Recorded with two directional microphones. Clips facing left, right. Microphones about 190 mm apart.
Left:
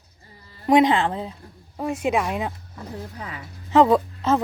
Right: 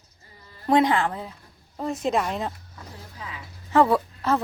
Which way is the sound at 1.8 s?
10° left (ahead or behind).